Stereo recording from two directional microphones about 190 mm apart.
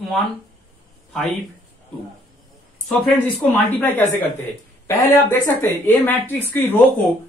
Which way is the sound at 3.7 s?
10° left (ahead or behind).